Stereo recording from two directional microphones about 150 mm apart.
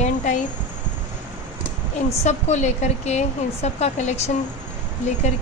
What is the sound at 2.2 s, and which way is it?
A woman's voice, 50° left (ahead or behind).